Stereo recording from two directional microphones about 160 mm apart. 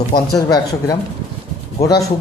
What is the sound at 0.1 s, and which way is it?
Speech, 25° left (ahead or behind).